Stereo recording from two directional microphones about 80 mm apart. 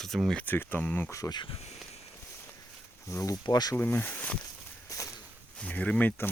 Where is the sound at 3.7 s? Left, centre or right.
Left.